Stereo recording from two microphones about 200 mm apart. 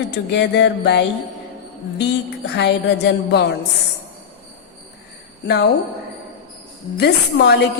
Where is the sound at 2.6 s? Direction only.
55° left (ahead or behind).